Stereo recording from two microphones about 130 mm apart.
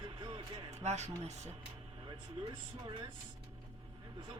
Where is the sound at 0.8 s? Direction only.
60° right (ahead or behind).